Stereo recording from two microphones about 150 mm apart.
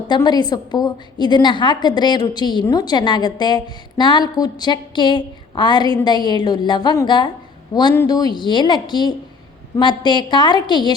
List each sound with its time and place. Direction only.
0.1 s a woman's voice: 30° left (ahead or behind)